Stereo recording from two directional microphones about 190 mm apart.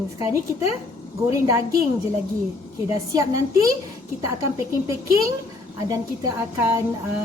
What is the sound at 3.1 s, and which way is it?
A woman's voice, 20° right (ahead or behind).